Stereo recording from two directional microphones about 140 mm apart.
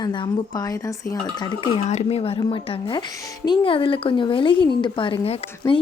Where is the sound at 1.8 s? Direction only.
55° left (ahead or behind).